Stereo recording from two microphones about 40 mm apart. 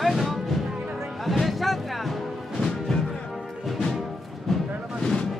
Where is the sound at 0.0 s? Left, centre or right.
Centre.